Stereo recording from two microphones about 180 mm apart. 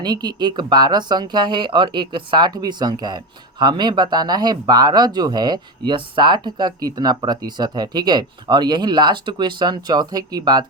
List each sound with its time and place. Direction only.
0.0 s speech: 25° right (ahead or behind)